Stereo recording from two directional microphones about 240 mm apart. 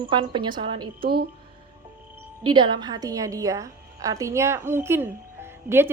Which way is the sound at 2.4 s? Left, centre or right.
Centre.